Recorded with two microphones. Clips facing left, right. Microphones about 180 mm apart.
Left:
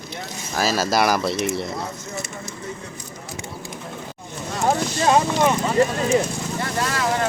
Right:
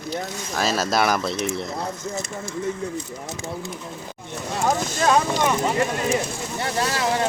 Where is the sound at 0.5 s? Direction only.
5° left (ahead or behind).